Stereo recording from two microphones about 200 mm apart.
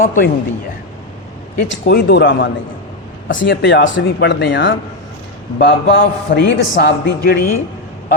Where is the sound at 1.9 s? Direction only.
60° left (ahead or behind).